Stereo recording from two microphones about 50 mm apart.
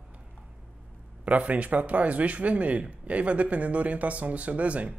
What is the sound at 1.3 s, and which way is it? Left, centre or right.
Speech, right.